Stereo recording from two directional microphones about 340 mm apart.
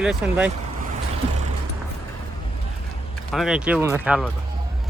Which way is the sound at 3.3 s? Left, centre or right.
Centre.